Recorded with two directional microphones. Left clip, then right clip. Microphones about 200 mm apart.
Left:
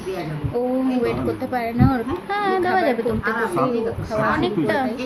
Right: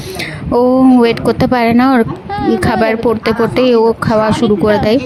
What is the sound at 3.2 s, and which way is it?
Speech, 55° right (ahead or behind).